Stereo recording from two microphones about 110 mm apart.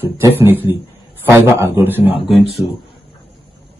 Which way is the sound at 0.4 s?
20° right (ahead or behind).